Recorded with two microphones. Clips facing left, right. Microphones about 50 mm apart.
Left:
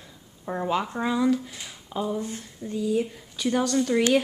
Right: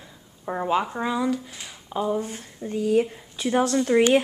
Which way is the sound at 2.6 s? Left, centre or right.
Right.